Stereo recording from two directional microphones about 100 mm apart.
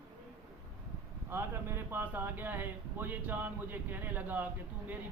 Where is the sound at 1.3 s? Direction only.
25° right (ahead or behind).